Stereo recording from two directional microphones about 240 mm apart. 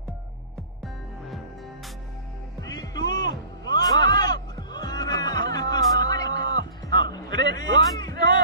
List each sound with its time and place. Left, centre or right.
2.6 s music: centre